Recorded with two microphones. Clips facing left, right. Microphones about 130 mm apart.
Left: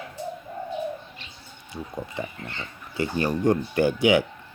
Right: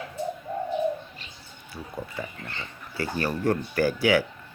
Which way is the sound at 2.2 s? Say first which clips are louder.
Left 2 dB; 25° left (ahead or behind).